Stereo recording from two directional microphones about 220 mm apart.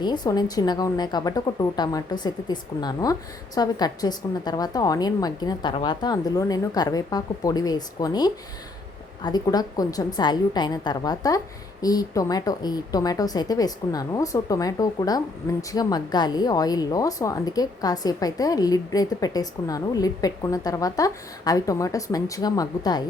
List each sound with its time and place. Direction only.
0.0 s speech: 20° left (ahead or behind)